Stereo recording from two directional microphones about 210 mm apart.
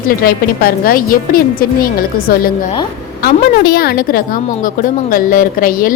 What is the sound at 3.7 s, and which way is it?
A woman's voice, 45° left (ahead or behind).